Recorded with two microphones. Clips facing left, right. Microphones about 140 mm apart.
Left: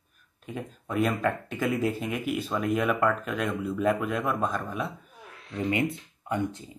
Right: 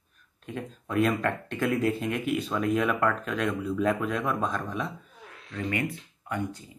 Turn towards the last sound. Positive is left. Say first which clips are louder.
# left 3 dB
turn(degrees=20)  # may be behind; listen again after turning